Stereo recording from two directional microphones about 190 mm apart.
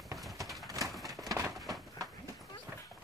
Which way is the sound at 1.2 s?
15° right (ahead or behind).